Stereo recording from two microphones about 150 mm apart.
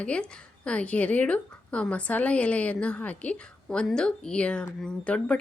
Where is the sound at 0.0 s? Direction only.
10° left (ahead or behind).